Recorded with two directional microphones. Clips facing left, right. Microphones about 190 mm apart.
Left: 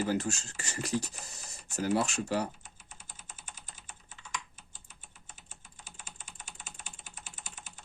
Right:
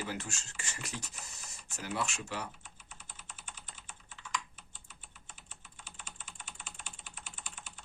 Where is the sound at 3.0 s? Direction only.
45° left (ahead or behind).